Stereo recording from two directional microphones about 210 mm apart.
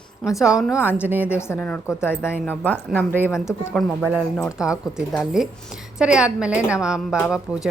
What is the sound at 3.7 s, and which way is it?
A woman's voice, 5° right (ahead or behind).